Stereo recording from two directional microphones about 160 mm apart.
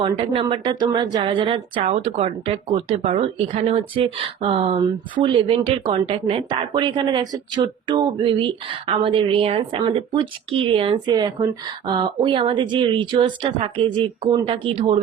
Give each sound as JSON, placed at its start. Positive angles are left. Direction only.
{"t": 0.0, "sound": "speech", "side_deg": -35}
{"t": 1.8, "sound": "speech", "side_deg": -45}